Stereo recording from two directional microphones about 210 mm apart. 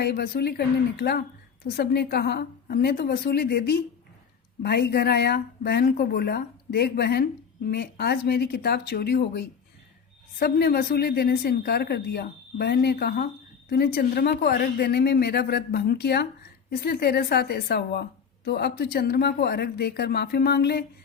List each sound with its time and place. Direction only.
0.0 s speech: 50° left (ahead or behind)